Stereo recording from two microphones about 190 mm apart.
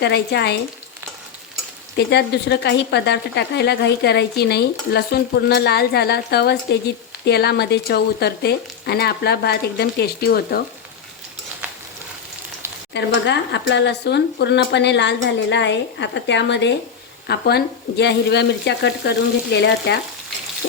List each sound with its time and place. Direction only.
0.0 s a woman's voice: 60° left (ahead or behind)
2.0 s a woman's voice: 60° left (ahead or behind)
12.9 s a woman's voice: 65° left (ahead or behind)